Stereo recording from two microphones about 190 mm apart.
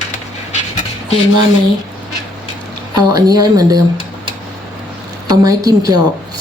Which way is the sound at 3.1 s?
20° right (ahead or behind).